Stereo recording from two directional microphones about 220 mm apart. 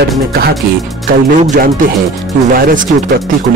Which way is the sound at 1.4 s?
35° right (ahead or behind).